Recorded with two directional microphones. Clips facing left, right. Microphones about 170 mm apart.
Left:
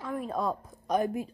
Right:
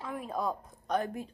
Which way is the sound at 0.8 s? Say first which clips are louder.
Left 4 dB; 10° left (ahead or behind).